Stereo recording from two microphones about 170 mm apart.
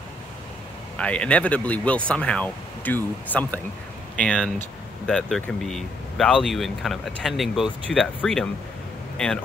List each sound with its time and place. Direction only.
0.9 s speech: 5° left (ahead or behind)